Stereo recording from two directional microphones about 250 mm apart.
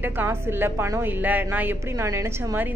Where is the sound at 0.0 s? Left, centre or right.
Centre.